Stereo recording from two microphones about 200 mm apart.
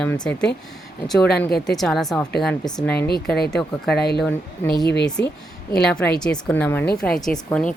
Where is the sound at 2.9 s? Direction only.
55° left (ahead or behind).